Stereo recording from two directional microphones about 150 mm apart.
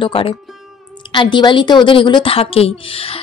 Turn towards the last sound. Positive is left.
turn(degrees=40)  # may be behind; listen again after turning